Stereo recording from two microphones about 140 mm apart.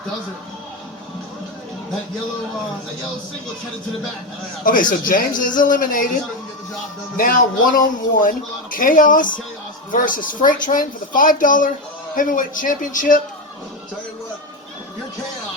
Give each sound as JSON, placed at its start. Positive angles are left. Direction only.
{"t": 4.6, "sound": "speech", "side_deg": 75}
{"t": 7.2, "sound": "speech", "side_deg": 80}